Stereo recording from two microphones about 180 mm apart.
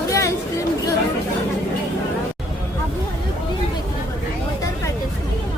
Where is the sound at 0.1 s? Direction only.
15° left (ahead or behind).